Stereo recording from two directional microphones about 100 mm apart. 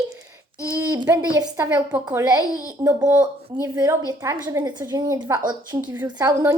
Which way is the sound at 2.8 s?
30° right (ahead or behind).